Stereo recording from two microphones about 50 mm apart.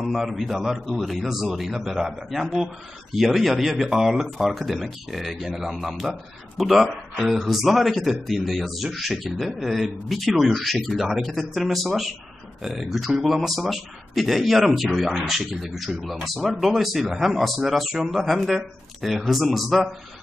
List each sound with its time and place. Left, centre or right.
0.0 s speech: centre